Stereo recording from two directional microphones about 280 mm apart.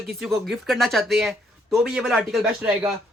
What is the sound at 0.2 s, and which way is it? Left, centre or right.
Speech, centre.